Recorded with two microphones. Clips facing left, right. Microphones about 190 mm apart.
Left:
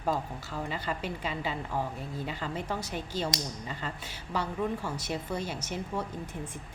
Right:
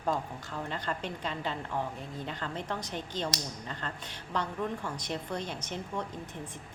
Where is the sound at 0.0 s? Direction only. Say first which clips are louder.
Left 1 dB; 5° left (ahead or behind).